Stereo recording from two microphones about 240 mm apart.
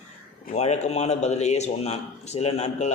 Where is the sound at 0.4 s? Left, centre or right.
Left.